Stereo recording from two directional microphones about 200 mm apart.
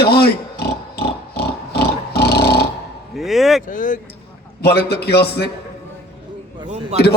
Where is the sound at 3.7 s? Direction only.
40° left (ahead or behind).